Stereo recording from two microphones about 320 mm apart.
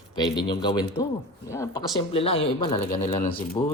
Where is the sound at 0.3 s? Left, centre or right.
Centre.